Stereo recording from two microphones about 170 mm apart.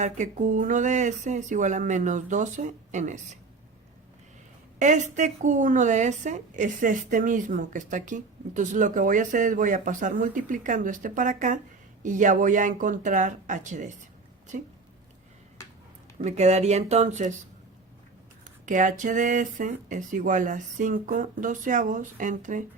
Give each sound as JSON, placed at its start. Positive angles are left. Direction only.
{"t": 0.0, "sound": "a woman's voice", "side_deg": -45}
{"t": 4.8, "sound": "a woman's voice", "side_deg": -45}
{"t": 16.1, "sound": "speech", "side_deg": -45}
{"t": 18.6, "sound": "a woman's voice", "side_deg": -50}